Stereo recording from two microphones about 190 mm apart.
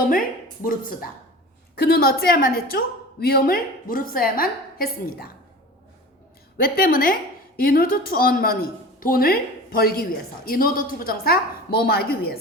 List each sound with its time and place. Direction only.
0.1 s speech: 45° left (ahead or behind)
6.6 s speech: 50° left (ahead or behind)